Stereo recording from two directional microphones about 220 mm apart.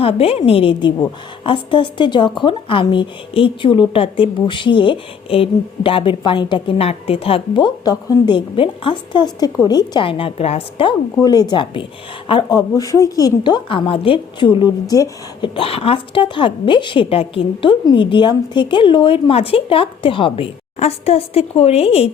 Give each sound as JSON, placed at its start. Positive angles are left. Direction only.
{"t": 0.0, "sound": "a woman's voice", "side_deg": 25}